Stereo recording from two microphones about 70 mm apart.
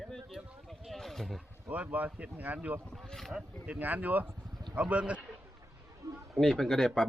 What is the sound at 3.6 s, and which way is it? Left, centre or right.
Speech, right.